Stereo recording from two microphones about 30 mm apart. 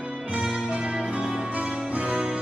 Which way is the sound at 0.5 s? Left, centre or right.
Right.